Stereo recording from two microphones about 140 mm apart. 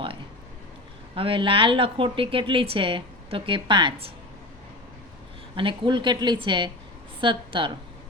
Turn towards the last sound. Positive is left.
turn(degrees=-35)  # may be behind; listen again after turning